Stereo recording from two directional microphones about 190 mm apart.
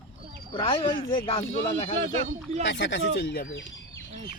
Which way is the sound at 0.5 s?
25° left (ahead or behind).